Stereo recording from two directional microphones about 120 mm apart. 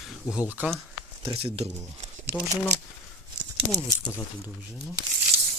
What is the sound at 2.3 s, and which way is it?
Speech, 30° right (ahead or behind).